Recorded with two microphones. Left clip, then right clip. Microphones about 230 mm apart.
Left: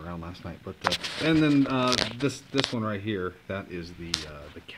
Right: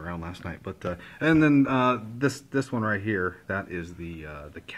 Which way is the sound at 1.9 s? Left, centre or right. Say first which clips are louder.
Even; centre.